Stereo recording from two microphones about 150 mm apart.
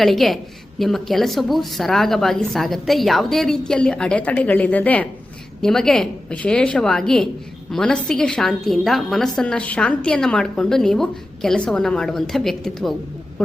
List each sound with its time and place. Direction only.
0.0 s a woman's voice: centre (ahead or behind)